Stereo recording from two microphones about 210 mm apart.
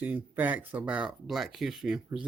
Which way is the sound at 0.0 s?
10° right (ahead or behind).